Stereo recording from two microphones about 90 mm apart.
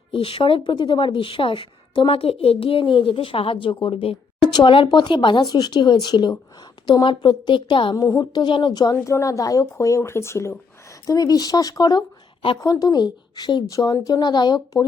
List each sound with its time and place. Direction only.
0.1 s speech: 90° left
4.4 s speech: 55° left (ahead or behind)
7.9 s speech: 40° left (ahead or behind)
8.3 s speech: 55° left (ahead or behind)
9.0 s speech: 35° left (ahead or behind)
11.0 s speech: 40° left (ahead or behind)
13.7 s speech: 40° left (ahead or behind)